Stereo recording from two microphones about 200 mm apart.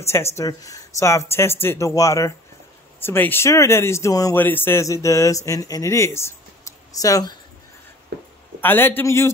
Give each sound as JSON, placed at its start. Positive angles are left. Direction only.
{"t": 0.0, "sound": "speech", "side_deg": 15}
{"t": 8.1, "sound": "a sound", "side_deg": -55}
{"t": 8.5, "sound": "speech", "side_deg": 10}